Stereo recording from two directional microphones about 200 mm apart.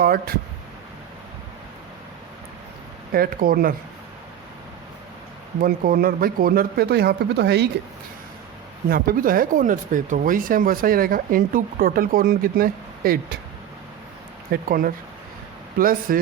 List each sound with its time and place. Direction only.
0.0 s speech: 50° right (ahead or behind)
3.1 s speech: 45° right (ahead or behind)
5.5 s speech: 45° right (ahead or behind)
8.9 s speech: 45° right (ahead or behind)
14.5 s speech: 45° right (ahead or behind)